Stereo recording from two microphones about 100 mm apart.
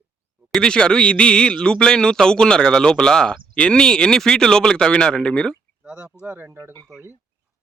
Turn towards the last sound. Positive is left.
turn(degrees=-25)  # may be behind; listen again after turning